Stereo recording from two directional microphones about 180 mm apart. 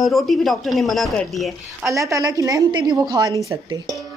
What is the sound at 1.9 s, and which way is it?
A woman's voice, 15° right (ahead or behind).